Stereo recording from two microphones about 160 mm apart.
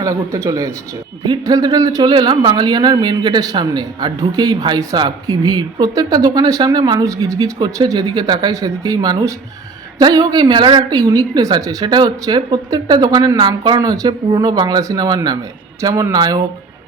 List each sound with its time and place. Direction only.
0.0 s a man's voice: 20° right (ahead or behind)